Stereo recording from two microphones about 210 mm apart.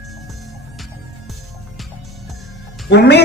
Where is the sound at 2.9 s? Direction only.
55° left (ahead or behind).